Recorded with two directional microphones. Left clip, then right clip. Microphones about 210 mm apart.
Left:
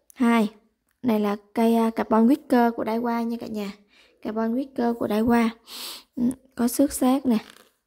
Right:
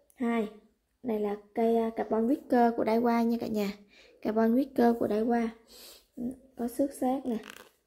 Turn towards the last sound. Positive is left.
turn(degrees=35)  # may be behind; listen again after turning